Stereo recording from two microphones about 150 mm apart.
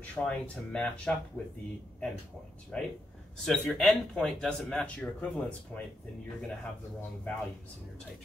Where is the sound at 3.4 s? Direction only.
Centre (ahead or behind).